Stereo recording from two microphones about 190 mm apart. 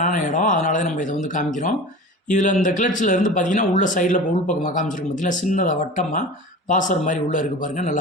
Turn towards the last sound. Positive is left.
turn(degrees=45)  # may be behind; listen again after turning